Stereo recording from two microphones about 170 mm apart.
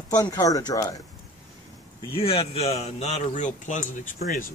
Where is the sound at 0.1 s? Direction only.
20° left (ahead or behind).